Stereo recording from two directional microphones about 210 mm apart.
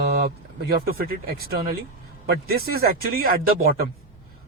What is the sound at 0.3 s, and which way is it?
Speech, 45° right (ahead or behind).